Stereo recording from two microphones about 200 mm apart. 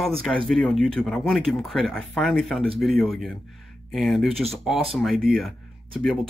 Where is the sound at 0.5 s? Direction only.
Centre (ahead or behind).